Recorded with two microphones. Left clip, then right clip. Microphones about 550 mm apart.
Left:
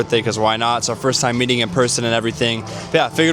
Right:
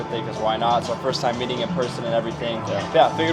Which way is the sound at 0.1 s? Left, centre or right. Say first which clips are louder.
Left 4 dB; left.